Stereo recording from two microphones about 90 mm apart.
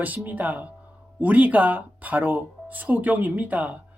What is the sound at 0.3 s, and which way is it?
Speech, 20° right (ahead or behind).